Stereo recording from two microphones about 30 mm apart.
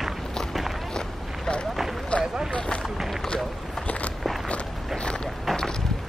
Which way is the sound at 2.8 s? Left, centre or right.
Centre.